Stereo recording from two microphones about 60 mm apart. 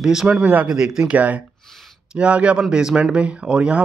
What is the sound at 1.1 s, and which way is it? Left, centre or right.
Speech, right.